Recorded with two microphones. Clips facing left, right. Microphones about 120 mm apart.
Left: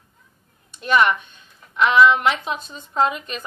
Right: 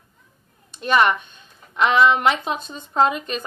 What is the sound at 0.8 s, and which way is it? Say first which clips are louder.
Speech: even; 35° right (ahead or behind).